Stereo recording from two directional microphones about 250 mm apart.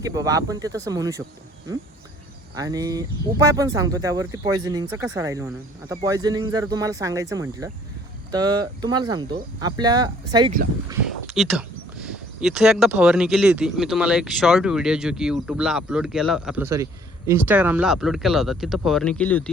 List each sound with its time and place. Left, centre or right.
0.0 s speech: centre
2.6 s speech: centre
11.3 s speech: centre